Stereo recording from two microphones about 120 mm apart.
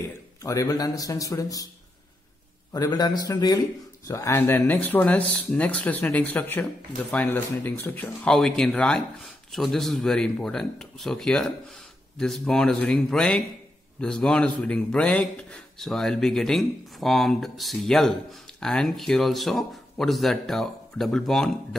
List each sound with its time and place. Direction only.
0.4 s a man's voice: 30° left (ahead or behind)
2.7 s a man's voice: 35° left (ahead or behind); by 8.3 s 15° left (ahead or behind)
8.3 s speech: 5° left (ahead or behind)